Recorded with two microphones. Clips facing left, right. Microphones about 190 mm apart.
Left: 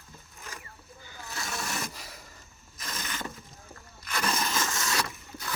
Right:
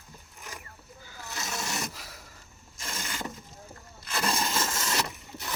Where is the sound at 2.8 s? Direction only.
25° right (ahead or behind).